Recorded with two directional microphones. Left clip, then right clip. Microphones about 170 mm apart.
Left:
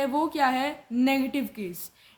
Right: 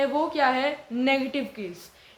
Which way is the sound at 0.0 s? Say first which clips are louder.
Right 2 dB; 45° left (ahead or behind).